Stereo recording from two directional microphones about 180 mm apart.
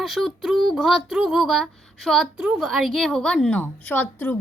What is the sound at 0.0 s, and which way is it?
A woman's voice, centre (ahead or behind).